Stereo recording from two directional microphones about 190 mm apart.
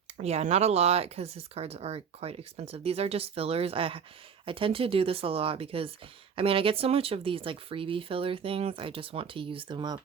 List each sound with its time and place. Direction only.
0.2 s speech: 35° right (ahead or behind)